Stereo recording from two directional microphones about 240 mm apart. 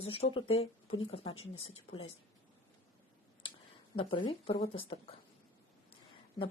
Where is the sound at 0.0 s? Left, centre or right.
Left.